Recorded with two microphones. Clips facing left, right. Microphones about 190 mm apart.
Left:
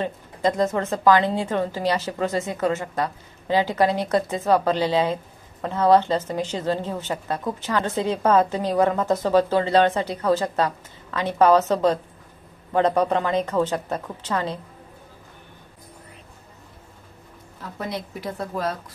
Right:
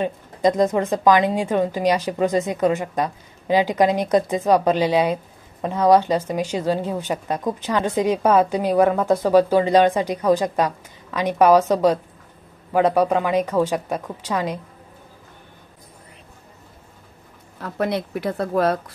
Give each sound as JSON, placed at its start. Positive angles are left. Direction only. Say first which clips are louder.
{"t": 0.0, "sound": "a woman's voice", "louder": "right 4 dB", "side_deg": -15}
{"t": 17.6, "sound": "speech", "louder": "right 7 dB", "side_deg": -65}